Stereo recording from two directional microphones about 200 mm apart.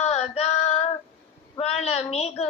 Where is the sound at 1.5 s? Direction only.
30° left (ahead or behind).